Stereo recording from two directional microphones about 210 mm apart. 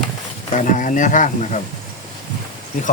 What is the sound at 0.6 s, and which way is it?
Speech, 40° left (ahead or behind).